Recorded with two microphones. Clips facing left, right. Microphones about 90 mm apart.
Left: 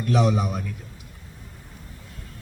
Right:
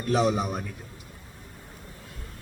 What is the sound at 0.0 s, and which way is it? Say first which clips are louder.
Speech: left 2 dB; 35° right (ahead or behind).